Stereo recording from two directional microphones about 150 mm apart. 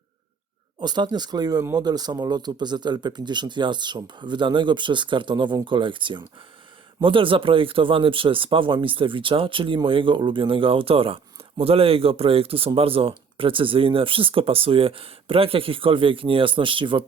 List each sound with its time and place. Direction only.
0.8 s speech: 30° right (ahead or behind)